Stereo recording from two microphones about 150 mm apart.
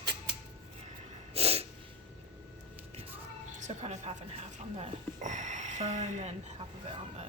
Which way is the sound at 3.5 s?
50° right (ahead or behind).